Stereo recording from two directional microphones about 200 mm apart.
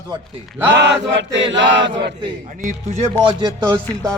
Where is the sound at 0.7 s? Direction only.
60° right (ahead or behind).